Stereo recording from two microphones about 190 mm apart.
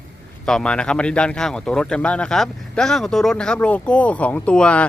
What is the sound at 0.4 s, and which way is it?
Speech, 5° left (ahead or behind).